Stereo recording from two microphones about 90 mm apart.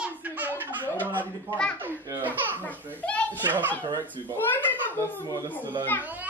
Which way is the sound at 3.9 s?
50° right (ahead or behind).